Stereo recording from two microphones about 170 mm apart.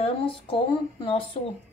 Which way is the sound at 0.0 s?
35° left (ahead or behind).